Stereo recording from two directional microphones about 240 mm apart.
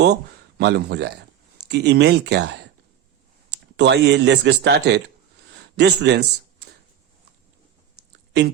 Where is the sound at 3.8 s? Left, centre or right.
Right.